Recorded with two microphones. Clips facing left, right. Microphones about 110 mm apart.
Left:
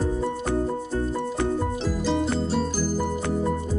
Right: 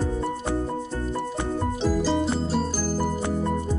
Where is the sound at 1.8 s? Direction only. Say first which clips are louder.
Right 2 dB; centre (ahead or behind).